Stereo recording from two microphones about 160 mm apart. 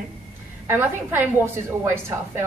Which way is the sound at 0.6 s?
15° right (ahead or behind).